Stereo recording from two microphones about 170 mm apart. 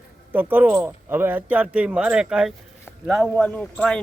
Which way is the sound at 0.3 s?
10° right (ahead or behind).